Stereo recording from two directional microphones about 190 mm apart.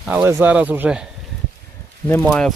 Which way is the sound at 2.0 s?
5° left (ahead or behind).